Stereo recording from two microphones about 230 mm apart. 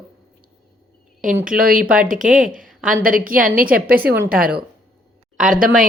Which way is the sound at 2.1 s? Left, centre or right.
Right.